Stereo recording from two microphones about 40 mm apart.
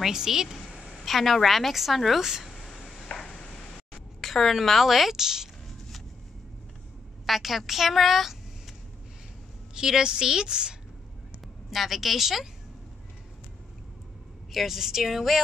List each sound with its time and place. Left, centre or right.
0.0 s a sound: centre
1.0 s a woman's voice: centre
2.2 s speech: centre
2.5 s a sound: centre
4.2 s a woman's voice: centre
5.7 s vehicle: centre
7.2 s a woman's voice: centre
9.8 s a woman's voice: centre
11.4 s a woman's voice: centre
14.5 s a woman's voice: centre